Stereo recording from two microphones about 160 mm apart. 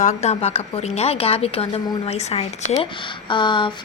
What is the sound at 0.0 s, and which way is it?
A woman's voice, 45° left (ahead or behind).